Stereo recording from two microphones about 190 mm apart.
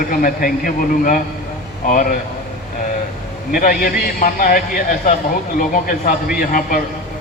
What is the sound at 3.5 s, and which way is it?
A man's voice, 50° left (ahead or behind).